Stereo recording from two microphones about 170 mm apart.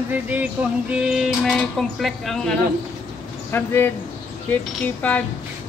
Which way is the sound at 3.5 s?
15° left (ahead or behind).